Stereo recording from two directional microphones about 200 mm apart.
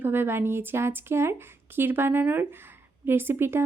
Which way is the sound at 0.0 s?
10° right (ahead or behind).